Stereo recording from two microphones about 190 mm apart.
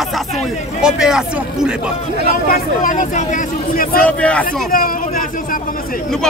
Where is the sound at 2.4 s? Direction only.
45° left (ahead or behind).